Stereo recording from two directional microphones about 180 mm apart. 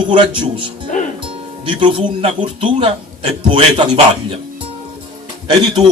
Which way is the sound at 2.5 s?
30° right (ahead or behind).